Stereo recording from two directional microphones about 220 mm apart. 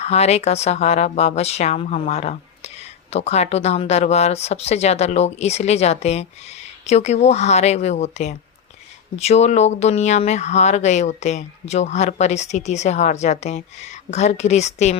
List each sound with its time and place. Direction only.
0.0 s speech: 30° left (ahead or behind)